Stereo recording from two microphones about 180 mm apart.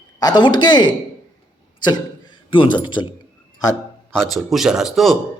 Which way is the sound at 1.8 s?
25° left (ahead or behind).